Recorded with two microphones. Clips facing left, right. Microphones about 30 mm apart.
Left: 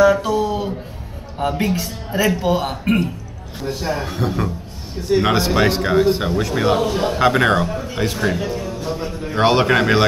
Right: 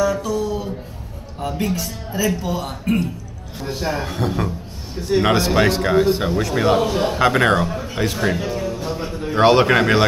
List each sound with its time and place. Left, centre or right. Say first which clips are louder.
0.0 s a sound: left 5 dB; left
1.4 s a man's voice: left 3 dB; left
3.6 s speech: left 1 dB; centre